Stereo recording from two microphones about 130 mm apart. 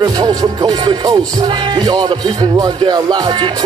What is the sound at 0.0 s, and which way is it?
Music, 35° right (ahead or behind).